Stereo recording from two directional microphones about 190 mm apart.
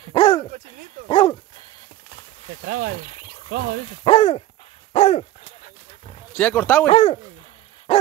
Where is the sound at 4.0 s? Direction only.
30° left (ahead or behind).